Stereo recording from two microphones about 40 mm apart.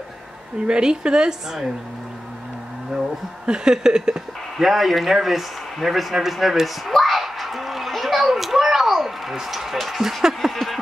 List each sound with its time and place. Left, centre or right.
0.6 s speech: right
3.0 s speech: centre
4.6 s speech: centre
6.9 s a sound: centre